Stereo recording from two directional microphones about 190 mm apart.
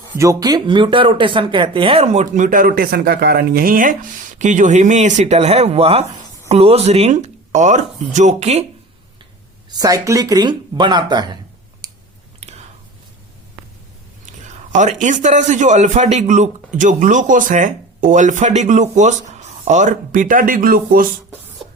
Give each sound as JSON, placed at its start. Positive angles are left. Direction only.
{"t": 0.2, "sound": "a man's voice", "side_deg": -15}
{"t": 9.6, "sound": "speech", "side_deg": -20}
{"t": 11.8, "sound": "clicking", "side_deg": -20}
{"t": 12.4, "sound": "whispering", "side_deg": -35}
{"t": 14.7, "sound": "a man's voice", "side_deg": -40}